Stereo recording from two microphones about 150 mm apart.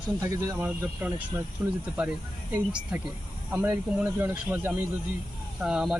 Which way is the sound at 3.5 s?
15° right (ahead or behind).